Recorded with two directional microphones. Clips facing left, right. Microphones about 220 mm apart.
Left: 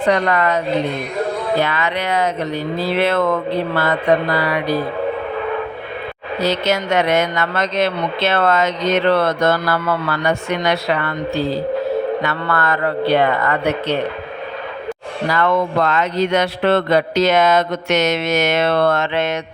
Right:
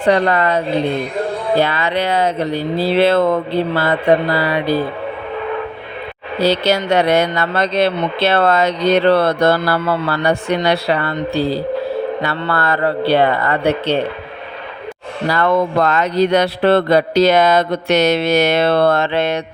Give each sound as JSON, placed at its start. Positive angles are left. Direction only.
{"t": 0.0, "sound": "speech", "side_deg": -30}
{"t": 6.4, "sound": "speech", "side_deg": -30}
{"t": 15.3, "sound": "speech", "side_deg": -35}